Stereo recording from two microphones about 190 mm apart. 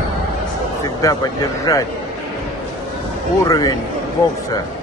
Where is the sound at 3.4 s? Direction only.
20° left (ahead or behind).